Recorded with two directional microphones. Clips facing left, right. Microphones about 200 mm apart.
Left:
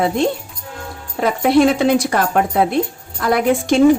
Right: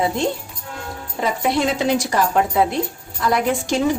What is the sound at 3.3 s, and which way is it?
Speech, 55° left (ahead or behind).